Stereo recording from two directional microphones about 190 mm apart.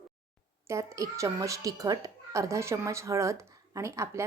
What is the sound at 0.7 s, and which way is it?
A woman's voice, 15° right (ahead or behind).